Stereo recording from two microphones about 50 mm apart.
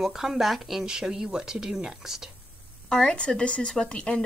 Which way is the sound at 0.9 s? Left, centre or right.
Centre.